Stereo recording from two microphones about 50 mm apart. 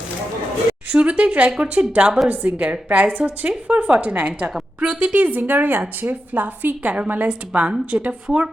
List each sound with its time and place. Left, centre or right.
0.9 s speech: right
2.2 s a woman's voice: right
5.1 s a woman's voice: right